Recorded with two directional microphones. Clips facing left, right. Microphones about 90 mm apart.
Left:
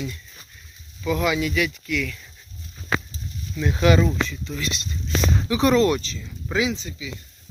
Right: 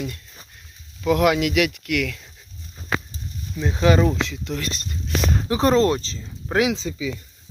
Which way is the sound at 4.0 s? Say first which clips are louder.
Right 2 dB; 75° right (ahead or behind).